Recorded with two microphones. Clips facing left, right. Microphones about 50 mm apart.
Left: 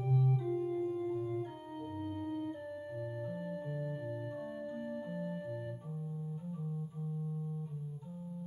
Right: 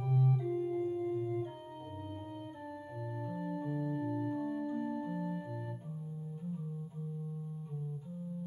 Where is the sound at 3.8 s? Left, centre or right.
Centre.